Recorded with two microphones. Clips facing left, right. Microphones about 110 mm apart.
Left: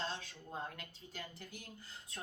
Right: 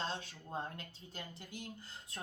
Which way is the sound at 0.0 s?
30° right (ahead or behind).